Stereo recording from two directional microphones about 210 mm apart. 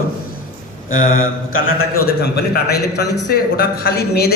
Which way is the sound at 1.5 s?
75° left (ahead or behind).